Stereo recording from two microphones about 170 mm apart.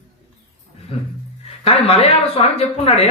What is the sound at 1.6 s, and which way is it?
Speech, 35° left (ahead or behind).